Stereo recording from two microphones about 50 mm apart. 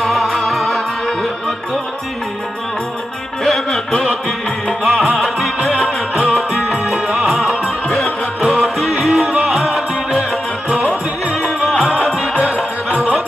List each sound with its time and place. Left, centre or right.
0.0 s music: centre
3.4 s music: centre
4.8 s music: centre
6.3 s music: centre